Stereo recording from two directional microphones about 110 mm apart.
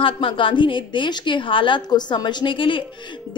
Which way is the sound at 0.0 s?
50° left (ahead or behind).